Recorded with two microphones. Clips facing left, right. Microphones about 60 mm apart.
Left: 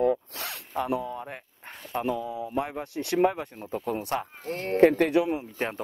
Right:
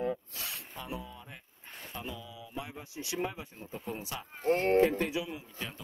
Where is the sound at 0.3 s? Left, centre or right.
Left.